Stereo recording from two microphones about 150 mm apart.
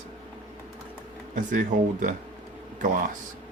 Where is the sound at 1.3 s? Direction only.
65° right (ahead or behind).